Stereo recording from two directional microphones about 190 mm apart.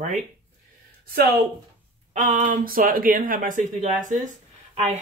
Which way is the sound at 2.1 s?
45° right (ahead or behind).